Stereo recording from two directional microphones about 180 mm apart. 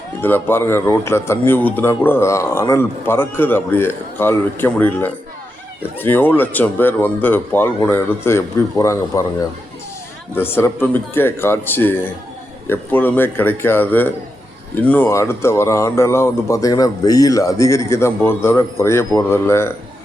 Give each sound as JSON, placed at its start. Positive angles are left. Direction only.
{"t": 0.2, "sound": "speech", "side_deg": 10}
{"t": 10.3, "sound": "speech", "side_deg": 10}